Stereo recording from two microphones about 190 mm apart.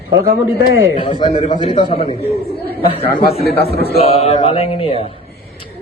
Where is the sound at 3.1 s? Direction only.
50° left (ahead or behind).